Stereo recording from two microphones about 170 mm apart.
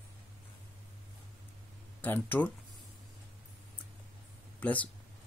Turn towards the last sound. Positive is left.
turn(degrees=10)  # may be behind; listen again after turning